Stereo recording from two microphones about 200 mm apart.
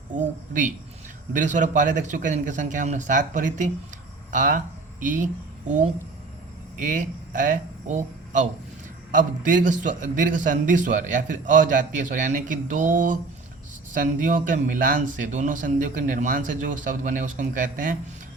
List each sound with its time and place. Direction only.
0.1 s a man's voice: 40° right (ahead or behind)